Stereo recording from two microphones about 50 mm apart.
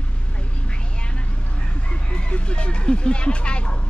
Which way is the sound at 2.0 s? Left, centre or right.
Left.